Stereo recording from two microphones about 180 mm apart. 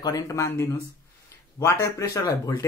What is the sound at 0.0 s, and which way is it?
Speech, 20° left (ahead or behind).